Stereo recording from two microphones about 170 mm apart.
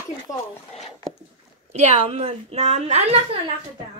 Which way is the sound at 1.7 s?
40° right (ahead or behind).